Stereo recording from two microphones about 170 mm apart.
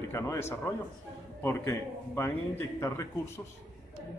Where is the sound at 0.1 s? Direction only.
15° left (ahead or behind).